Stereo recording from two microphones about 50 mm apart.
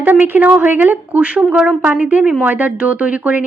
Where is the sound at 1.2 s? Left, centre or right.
Right.